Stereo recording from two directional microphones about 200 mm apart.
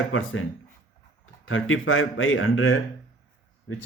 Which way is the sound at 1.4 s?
85° left.